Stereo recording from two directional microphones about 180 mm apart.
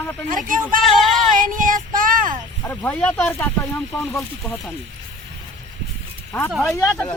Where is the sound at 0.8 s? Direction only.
Centre (ahead or behind).